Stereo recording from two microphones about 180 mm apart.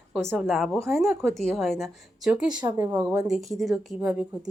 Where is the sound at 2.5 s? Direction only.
25° right (ahead or behind).